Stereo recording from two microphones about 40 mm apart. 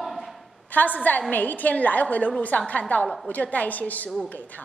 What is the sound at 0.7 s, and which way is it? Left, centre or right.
A woman's voice, left.